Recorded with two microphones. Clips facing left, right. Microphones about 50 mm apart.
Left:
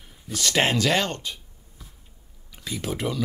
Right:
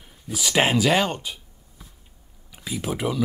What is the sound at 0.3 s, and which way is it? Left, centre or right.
Speech, centre.